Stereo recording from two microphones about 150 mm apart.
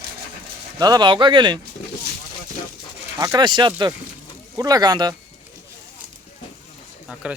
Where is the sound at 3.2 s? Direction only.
25° right (ahead or behind).